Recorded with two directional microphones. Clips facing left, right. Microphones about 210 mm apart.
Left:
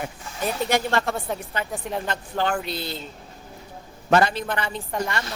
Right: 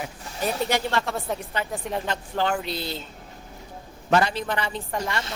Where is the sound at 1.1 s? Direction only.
Centre (ahead or behind).